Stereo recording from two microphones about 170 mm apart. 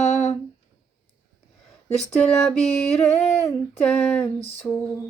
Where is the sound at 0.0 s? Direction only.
45° left (ahead or behind).